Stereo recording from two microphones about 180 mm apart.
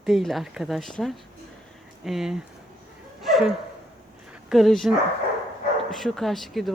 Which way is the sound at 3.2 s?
Centre (ahead or behind).